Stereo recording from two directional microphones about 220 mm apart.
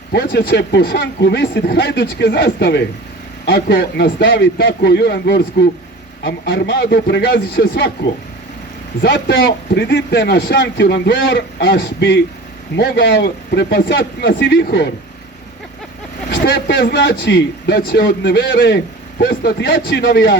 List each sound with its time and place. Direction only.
0.1 s a man's voice: 45° left (ahead or behind)
9.0 s a man's voice: 50° left (ahead or behind)
16.3 s a man's voice: 45° left (ahead or behind)